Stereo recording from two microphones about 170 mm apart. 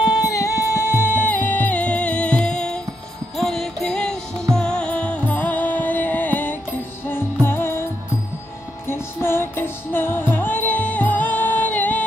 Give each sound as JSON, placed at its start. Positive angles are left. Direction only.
{"t": 0.0, "sound": "music", "side_deg": 25}
{"t": 8.8, "sound": "music", "side_deg": 15}